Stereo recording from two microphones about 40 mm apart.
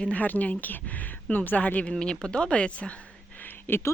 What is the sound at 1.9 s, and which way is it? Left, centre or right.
Speech, left.